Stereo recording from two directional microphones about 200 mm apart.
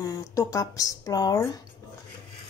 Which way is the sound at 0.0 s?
15° left (ahead or behind).